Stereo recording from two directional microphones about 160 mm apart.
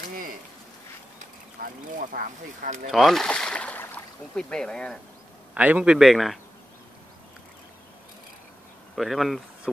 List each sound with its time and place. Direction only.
1.6 s speech: 60° right (ahead or behind)
2.9 s speech: centre (ahead or behind)
5.5 s a man's voice: 10° right (ahead or behind)
8.9 s a man's voice: centre (ahead or behind)